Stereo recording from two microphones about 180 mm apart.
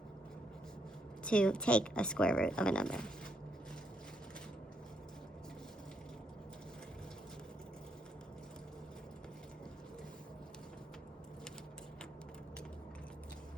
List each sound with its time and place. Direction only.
1.2 s speech: 5° left (ahead or behind)